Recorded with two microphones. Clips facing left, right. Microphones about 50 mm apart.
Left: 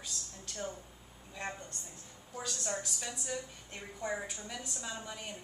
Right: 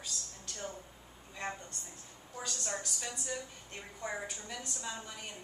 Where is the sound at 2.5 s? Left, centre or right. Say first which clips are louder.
Left 1 dB; centre.